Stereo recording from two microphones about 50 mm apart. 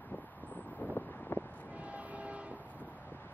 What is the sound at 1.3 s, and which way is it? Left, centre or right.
Vehicle, left.